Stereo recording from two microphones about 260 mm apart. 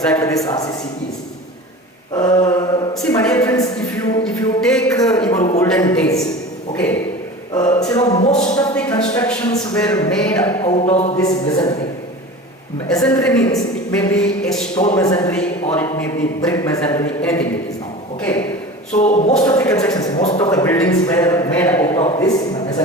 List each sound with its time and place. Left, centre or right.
0.0 s a man's voice: centre
2.2 s mantra: centre
3.1 s a man's voice: centre
4.2 s music: centre
5.5 s a man's voice: centre
7.5 s a sound: centre
8.2 s a sound: left
8.5 s a man's voice: centre
10.3 s a sound: centre
11.2 s a man's voice: centre
12.9 s a man's voice: centre
18.9 s a sound: left
19.4 s a man's voice: centre